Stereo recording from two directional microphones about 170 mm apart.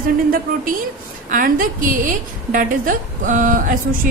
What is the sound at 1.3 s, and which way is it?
A woman's voice, 55° right (ahead or behind).